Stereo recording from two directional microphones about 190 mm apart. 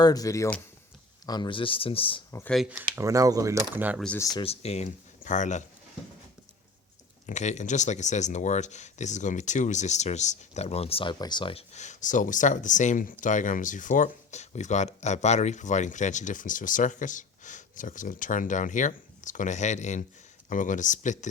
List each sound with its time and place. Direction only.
0.0 s speech: 20° left (ahead or behind)
2.3 s speech: 10° left (ahead or behind)
2.6 s speech: 5° right (ahead or behind)
4.4 s speech: 30° left (ahead or behind)
7.3 s speech: 40° left (ahead or behind)